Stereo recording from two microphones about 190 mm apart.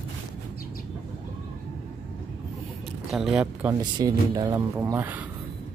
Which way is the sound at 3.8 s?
20° right (ahead or behind).